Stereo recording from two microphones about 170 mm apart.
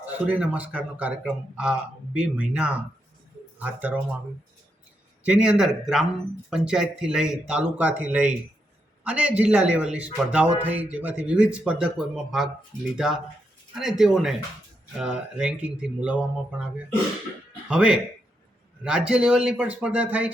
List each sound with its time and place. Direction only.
0.0 s a man's voice: 5° right (ahead or behind)
5.2 s a man's voice: 5° right (ahead or behind)
17.7 s a man's voice: 5° right (ahead or behind)